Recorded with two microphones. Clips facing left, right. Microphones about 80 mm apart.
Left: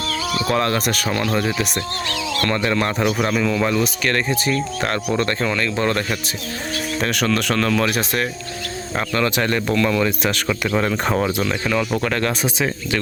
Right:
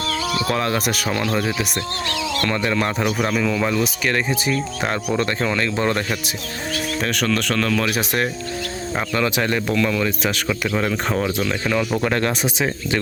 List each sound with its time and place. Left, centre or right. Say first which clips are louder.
0.4 s speech: left 4 dB; centre
7.0 s speech: left 2 dB; centre
11.7 s speech: right 1 dB; centre
12.0 s speech: right 1 dB; right